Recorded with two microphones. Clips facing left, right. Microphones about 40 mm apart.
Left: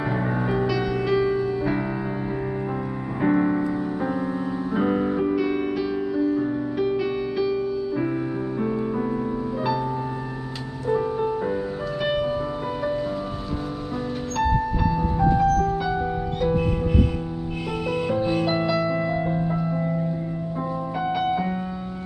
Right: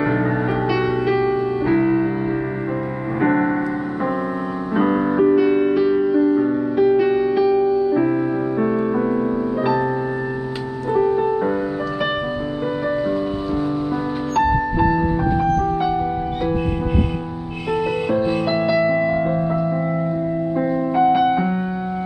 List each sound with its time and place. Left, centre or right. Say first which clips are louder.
0.7 s music: right 4 dB; centre
3.2 s music: right 3 dB; right
4.7 s music: right 6 dB; right
6.8 s music: right 10 dB; centre
8.6 s music: right 5 dB; right
14.3 s music: right 5 dB; centre
18.1 s music: right 3 dB; centre
21.0 s music: right 8 dB; centre